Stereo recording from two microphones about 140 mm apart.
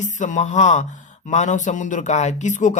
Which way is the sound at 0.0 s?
60° left (ahead or behind).